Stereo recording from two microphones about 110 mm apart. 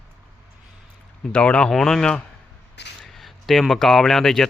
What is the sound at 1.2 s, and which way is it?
Speech, 10° left (ahead or behind).